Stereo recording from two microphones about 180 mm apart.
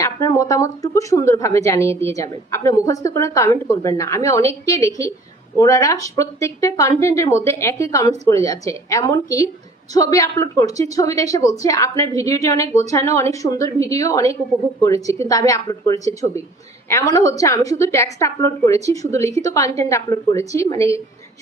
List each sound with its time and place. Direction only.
0.0 s speech: 20° left (ahead or behind)